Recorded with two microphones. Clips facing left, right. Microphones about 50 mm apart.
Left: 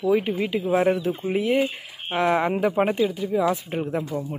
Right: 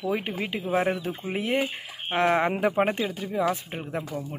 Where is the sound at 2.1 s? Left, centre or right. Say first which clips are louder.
Left 1 dB; right.